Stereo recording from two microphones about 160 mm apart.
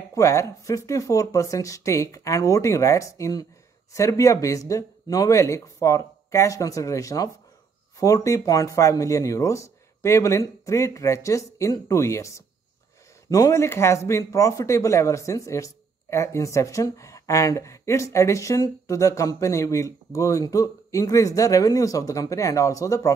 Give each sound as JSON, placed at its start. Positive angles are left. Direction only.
{"t": 0.1, "sound": "speech", "side_deg": 20}